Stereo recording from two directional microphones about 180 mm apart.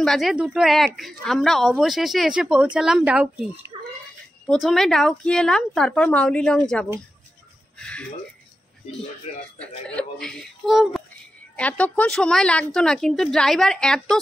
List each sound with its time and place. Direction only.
0.0 s a woman's voice: centre (ahead or behind)
9.3 s a man's voice: 35° left (ahead or behind)
9.6 s a woman's voice: 5° left (ahead or behind)